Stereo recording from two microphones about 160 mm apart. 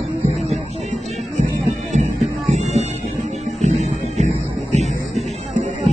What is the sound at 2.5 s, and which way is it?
Music, 45° right (ahead or behind).